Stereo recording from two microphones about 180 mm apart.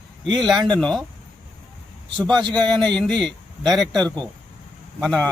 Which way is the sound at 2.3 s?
25° right (ahead or behind).